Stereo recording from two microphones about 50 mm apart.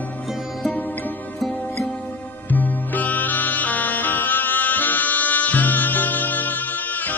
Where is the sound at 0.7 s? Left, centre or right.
Left.